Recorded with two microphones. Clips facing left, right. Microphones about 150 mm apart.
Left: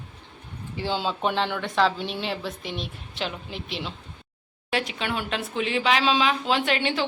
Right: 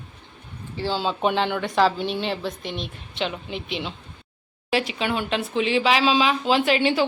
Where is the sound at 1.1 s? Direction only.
Centre (ahead or behind).